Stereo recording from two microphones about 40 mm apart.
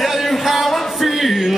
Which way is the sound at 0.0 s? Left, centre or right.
Centre.